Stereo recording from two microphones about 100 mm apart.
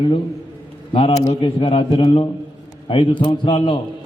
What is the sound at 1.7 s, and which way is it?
A man's voice, 55° left (ahead or behind).